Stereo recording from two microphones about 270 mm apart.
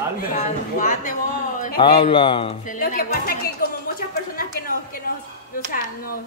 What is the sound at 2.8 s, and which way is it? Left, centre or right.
Speech, left.